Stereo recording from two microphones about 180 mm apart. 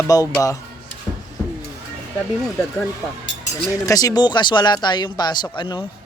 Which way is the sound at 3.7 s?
20° left (ahead or behind).